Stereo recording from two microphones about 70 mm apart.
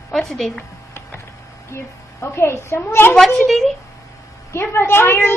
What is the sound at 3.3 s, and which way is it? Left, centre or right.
Speech, centre.